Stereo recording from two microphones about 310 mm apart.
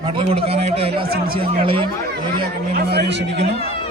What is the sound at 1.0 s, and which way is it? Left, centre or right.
Speech, right.